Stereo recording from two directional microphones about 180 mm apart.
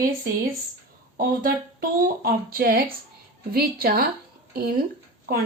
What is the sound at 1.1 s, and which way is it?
A woman's voice, 50° right (ahead or behind).